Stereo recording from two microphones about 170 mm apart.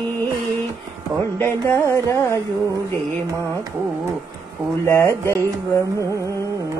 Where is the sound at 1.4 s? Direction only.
15° left (ahead or behind).